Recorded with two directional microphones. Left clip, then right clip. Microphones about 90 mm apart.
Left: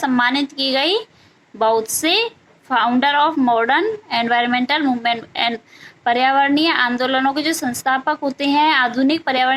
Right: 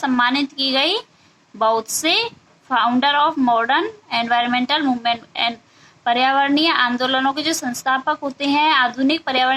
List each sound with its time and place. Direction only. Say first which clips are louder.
0.0 s a woman's voice: left 1 dB; 25° left (ahead or behind)